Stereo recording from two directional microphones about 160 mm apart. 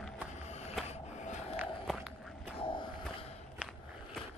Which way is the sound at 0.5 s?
40° left (ahead or behind).